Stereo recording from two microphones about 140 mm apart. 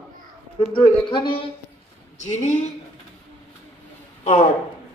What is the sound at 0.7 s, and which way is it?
Speech, 35° left (ahead or behind).